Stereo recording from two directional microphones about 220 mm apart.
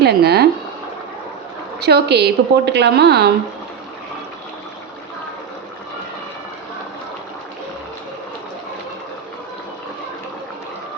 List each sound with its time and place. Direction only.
0.0 s a woman's voice: 45° right (ahead or behind)
1.8 s a woman's voice: 50° right (ahead or behind)